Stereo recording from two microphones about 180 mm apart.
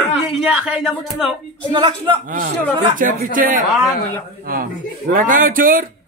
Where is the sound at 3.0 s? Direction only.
50° right (ahead or behind).